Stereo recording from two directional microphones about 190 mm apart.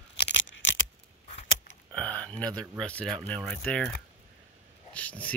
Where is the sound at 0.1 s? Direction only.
75° left (ahead or behind).